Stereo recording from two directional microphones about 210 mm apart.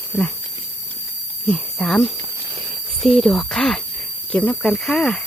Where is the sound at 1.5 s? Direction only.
5° left (ahead or behind).